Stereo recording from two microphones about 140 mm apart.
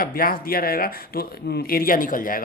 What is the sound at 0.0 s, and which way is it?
Speech, 90° left.